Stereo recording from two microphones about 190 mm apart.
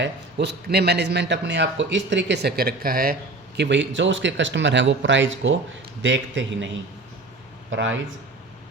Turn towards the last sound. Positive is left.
turn(degrees=-80)